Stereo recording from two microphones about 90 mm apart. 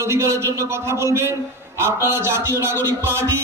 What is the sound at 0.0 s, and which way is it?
A man's voice, 30° right (ahead or behind).